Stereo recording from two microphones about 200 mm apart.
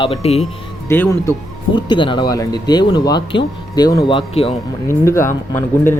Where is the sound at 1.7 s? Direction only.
25° left (ahead or behind).